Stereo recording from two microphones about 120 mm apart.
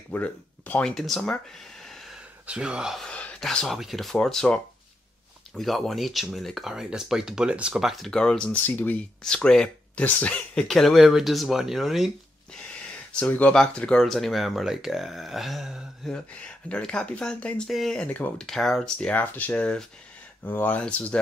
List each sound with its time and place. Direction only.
0.1 s speech: 15° left (ahead or behind)
1.9 s gasp: centre (ahead or behind)
2.4 s speech: 10° right (ahead or behind)
13.2 s speech: 10° left (ahead or behind)